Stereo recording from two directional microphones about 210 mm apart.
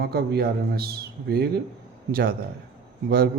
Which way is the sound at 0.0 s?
50° right (ahead or behind).